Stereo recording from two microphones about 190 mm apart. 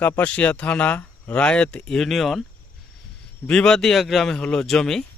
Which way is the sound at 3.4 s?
5° left (ahead or behind).